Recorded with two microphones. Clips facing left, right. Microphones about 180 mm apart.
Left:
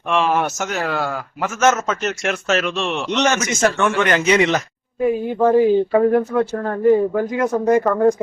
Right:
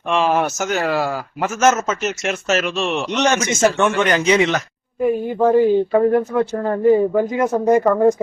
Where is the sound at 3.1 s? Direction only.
15° right (ahead or behind).